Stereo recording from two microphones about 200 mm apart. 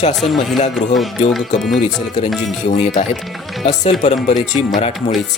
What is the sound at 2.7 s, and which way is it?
Speech, 35° left (ahead or behind).